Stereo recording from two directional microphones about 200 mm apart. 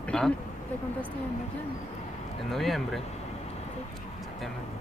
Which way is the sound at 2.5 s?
Centre (ahead or behind).